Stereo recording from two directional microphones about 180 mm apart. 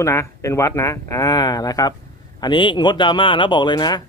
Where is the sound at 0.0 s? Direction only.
15° left (ahead or behind).